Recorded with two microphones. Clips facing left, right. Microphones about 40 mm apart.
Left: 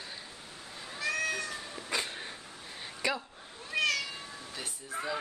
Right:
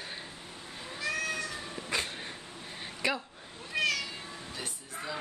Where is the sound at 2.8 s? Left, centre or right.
Centre.